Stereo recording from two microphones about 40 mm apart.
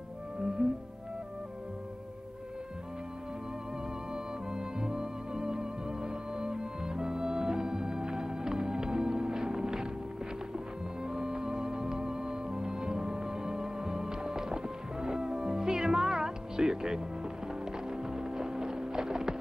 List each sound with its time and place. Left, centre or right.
0.6 s music: centre
4.1 s music: centre
11.0 s music: centre